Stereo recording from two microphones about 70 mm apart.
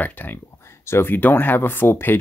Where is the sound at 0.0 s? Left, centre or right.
Left.